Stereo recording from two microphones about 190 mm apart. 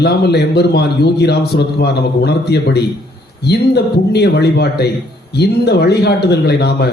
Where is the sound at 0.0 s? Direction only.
60° left (ahead or behind).